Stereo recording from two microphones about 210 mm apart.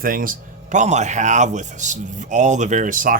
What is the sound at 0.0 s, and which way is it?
Speech, 40° right (ahead or behind).